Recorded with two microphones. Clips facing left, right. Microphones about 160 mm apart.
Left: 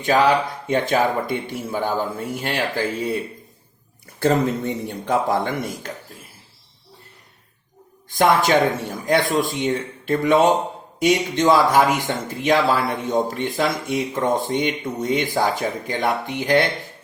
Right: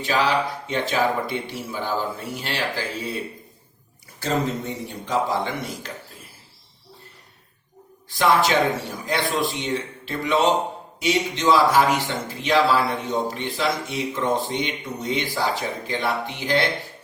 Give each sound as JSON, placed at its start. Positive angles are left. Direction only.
{"t": 0.0, "sound": "speech", "side_deg": 50}
{"t": 4.2, "sound": "speech", "side_deg": 55}
{"t": 8.1, "sound": "speech", "side_deg": 50}